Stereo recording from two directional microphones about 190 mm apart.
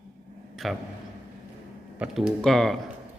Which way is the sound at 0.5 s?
Centre (ahead or behind).